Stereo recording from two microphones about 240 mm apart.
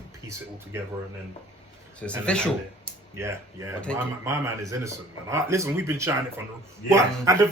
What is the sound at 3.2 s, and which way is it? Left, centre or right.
Speech, centre.